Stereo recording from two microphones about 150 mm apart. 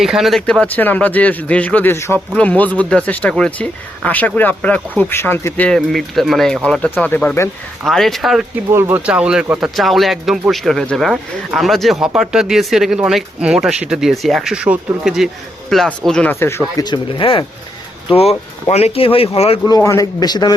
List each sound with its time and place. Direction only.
0.0 s speech: centre (ahead or behind); by 5.6 s 15° left (ahead or behind)
5.6 s speech: centre (ahead or behind)
7.9 s speech: centre (ahead or behind)
8.7 s speech: 15° right (ahead or behind); by 16.8 s 15° left (ahead or behind)
16.8 s speech: 35° left (ahead or behind)
19.6 s a man's voice: 25° left (ahead or behind)